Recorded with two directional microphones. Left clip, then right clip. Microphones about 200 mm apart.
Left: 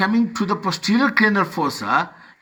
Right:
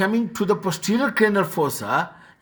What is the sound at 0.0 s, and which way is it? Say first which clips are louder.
Speech: left 2 dB; 30° left (ahead or behind).